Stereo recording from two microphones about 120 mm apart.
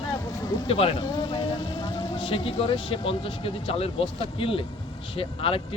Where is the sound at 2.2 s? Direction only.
50° left (ahead or behind).